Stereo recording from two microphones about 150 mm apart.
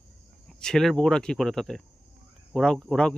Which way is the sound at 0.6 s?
5° left (ahead or behind).